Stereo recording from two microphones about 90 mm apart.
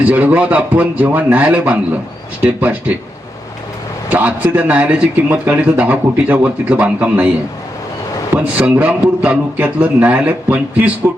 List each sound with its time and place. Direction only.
0.0 s a man's voice: 20° right (ahead or behind)
4.1 s a man's voice: 15° right (ahead or behind)
8.5 s a man's voice: 15° right (ahead or behind)